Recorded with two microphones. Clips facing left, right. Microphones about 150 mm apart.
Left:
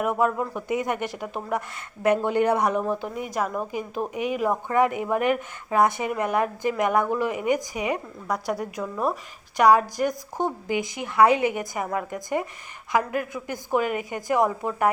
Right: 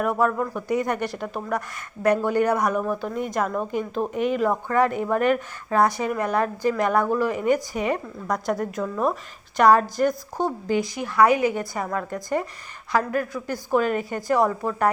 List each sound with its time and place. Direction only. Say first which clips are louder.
0.0 s a woman's voice: right 1 dB; 20° left (ahead or behind)
3.2 s a woman's voice: right 2 dB; 5° left (ahead or behind)